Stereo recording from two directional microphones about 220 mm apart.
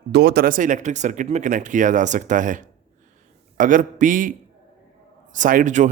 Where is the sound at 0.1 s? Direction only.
50° right (ahead or behind).